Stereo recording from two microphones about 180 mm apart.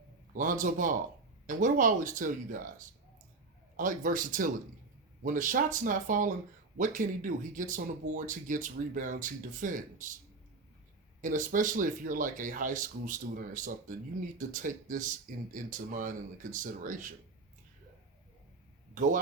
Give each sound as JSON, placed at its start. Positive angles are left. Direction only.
{"t": 0.3, "sound": "speech", "side_deg": -45}
{"t": 11.2, "sound": "speech", "side_deg": -45}
{"t": 18.9, "sound": "speech", "side_deg": -45}